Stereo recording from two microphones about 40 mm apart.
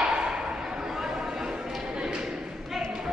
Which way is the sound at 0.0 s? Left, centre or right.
Centre.